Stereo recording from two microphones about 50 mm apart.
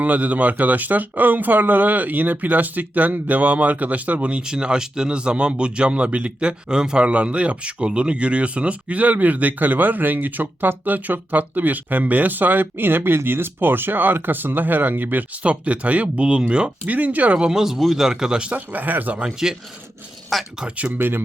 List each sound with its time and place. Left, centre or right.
0.0 s speech: right
4.4 s speech: centre; by 15.2 s right
15.4 s speech: right
16.8 s speech: right
17.3 s speech: centre
18.5 s speech: right
19.2 s speech: centre
20.7 s speech: right